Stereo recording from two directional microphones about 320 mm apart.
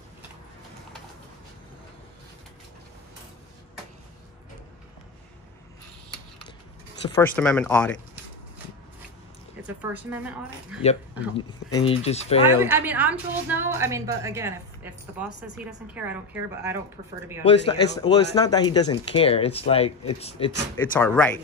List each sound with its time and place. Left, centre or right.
7.0 s speech: centre
9.8 s speech: centre
10.8 s speech: centre
12.5 s a woman's voice: centre
17.4 s speech: centre
20.7 s speech: centre